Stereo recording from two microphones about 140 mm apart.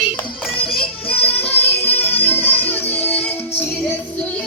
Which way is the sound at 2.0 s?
15° left (ahead or behind).